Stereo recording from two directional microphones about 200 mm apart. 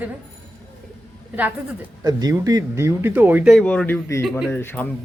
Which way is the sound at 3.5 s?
5° left (ahead or behind).